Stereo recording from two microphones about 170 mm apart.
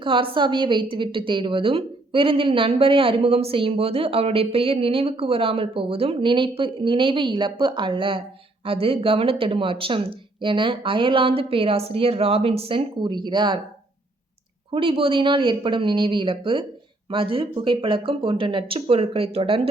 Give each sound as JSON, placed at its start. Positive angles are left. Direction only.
{"t": 0.0, "sound": "a woman's voice", "side_deg": -30}
{"t": 14.7, "sound": "a woman's voice", "side_deg": -30}